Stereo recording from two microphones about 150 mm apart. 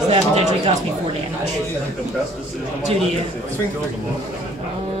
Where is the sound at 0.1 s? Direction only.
45° right (ahead or behind).